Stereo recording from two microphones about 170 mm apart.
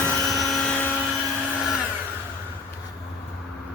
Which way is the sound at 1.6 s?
Centre (ahead or behind).